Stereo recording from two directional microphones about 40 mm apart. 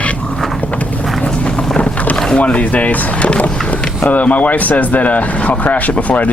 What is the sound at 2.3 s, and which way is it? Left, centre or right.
Speech, left.